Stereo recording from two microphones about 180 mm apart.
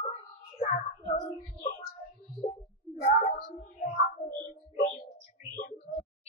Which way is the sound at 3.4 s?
45° left (ahead or behind).